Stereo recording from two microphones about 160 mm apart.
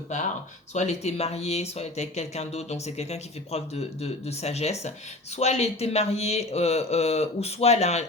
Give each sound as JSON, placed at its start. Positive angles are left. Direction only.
{"t": 0.7, "sound": "speech", "side_deg": 45}